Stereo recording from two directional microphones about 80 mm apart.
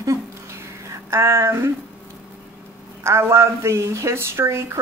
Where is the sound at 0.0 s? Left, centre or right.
Right.